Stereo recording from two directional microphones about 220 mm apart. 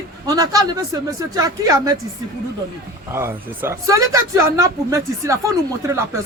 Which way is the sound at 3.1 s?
10° right (ahead or behind).